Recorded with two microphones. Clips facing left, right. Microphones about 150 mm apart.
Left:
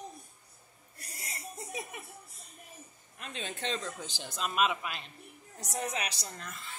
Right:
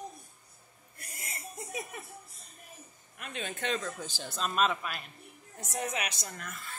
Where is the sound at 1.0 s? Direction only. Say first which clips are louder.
Even; 35° left (ahead or behind).